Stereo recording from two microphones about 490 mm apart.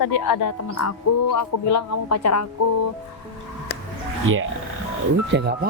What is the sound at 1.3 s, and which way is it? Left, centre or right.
Speech, left.